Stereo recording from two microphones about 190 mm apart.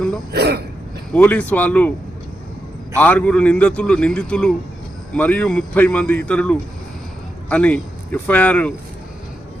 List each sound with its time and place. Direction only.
0.3 s speech: 60° right (ahead or behind)
1.1 s speech: 5° left (ahead or behind)
3.0 s a man's voice: 10° left (ahead or behind)